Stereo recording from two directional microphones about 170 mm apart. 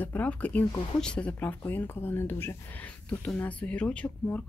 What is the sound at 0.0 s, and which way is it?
Speech, 10° left (ahead or behind).